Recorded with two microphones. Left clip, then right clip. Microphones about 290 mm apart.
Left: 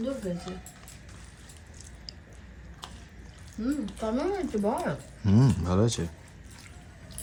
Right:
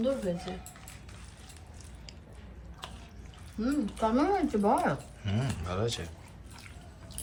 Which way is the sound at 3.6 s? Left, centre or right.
Centre.